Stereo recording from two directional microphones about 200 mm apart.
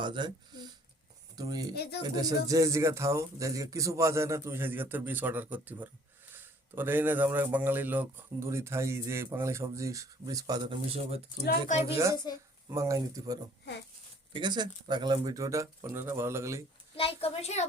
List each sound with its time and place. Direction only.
0.0 s speech: 20° right (ahead or behind)
1.7 s speech: 55° left (ahead or behind)
2.0 s speech: 20° right (ahead or behind)
11.7 s a woman's voice: 35° left (ahead or behind)
12.1 s speech: 20° left (ahead or behind)
12.7 s speech: 15° right (ahead or behind)
16.9 s a woman's voice: 30° left (ahead or behind)